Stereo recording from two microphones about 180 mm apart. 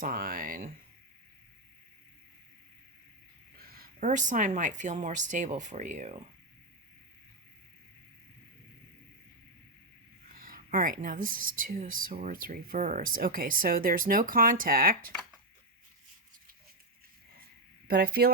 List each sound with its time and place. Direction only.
0.0 s speech: 50° right (ahead or behind)
3.8 s speech: 45° right (ahead or behind)
10.3 s speech: 50° right (ahead or behind)
17.8 s speech: 60° right (ahead or behind)